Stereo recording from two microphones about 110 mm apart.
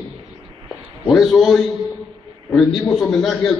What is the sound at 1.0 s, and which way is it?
A man's voice, centre (ahead or behind).